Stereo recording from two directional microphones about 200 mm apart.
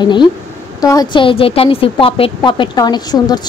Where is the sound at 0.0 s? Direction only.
20° left (ahead or behind).